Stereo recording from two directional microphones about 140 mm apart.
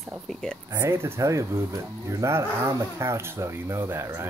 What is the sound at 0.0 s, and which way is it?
Speech, centre (ahead or behind).